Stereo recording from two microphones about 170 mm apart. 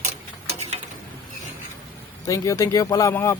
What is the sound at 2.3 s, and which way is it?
Speech, 20° left (ahead or behind).